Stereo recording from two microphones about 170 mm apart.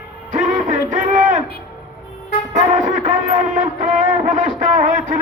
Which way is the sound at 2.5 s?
50° right (ahead or behind).